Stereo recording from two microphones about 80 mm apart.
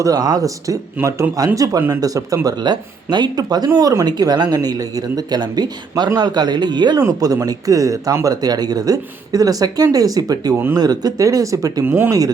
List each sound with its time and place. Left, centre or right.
0.0 s speech: right
1.0 s a man's voice: right
1.5 s speech: right
7.0 s speech: right
11.9 s speech: right